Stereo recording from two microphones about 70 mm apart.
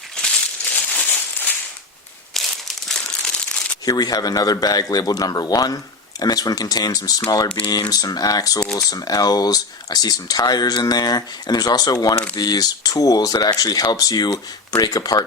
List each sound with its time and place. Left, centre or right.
0.2 s a sound: centre
2.3 s crumpling: centre
3.8 s a man's voice: left
8.6 s speech: centre
8.9 s a man's voice: left